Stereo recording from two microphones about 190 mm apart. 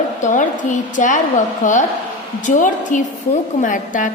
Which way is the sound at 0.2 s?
40° left (ahead or behind).